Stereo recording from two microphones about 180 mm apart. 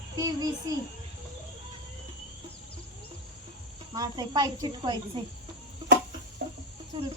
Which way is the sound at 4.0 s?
20° right (ahead or behind).